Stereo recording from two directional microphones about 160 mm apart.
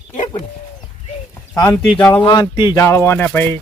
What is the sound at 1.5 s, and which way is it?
Speech, 20° left (ahead or behind).